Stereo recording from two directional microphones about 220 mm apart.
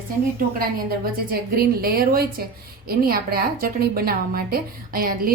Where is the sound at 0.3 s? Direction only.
45° right (ahead or behind).